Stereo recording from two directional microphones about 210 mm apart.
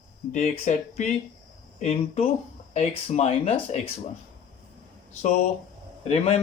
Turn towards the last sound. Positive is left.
turn(degrees=30)  # may be behind; listen again after turning